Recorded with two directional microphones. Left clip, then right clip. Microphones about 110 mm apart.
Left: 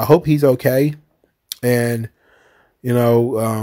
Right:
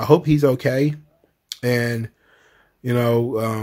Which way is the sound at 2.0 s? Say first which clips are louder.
Left 1 dB; 50° left (ahead or behind).